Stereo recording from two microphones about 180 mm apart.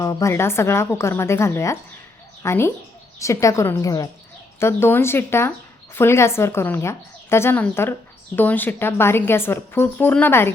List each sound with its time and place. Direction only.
0.0 s speech: 15° left (ahead or behind)